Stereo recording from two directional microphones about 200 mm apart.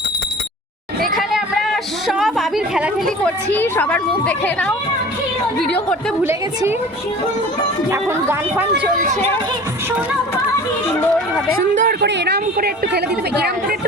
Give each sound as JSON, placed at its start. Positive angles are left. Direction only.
{"t": 1.0, "sound": "a sound", "side_deg": 0}
{"t": 3.5, "sound": "a woman's voice", "side_deg": 10}
{"t": 6.2, "sound": "speech", "side_deg": -10}
{"t": 7.9, "sound": "speech", "side_deg": -10}
{"t": 11.5, "sound": "a woman's voice", "side_deg": -45}